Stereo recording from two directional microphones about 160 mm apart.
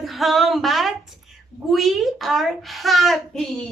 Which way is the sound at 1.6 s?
Centre (ahead or behind).